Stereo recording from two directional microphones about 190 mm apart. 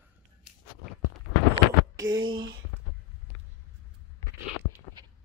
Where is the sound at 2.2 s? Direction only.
25° right (ahead or behind).